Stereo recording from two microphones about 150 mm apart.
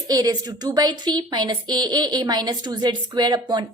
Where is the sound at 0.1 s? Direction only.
25° right (ahead or behind).